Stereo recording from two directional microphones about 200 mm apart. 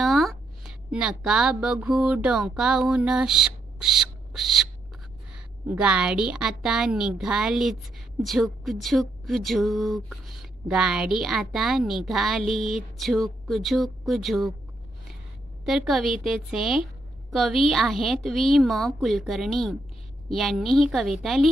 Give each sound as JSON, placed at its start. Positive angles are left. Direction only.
{"t": 0.0, "sound": "speech", "side_deg": 0}
{"t": 5.7, "sound": "a woman's voice", "side_deg": -5}
{"t": 15.6, "sound": "a woman's voice", "side_deg": 0}